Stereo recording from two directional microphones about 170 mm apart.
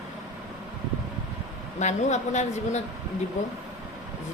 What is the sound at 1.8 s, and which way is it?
A woman's voice, 45° left (ahead or behind).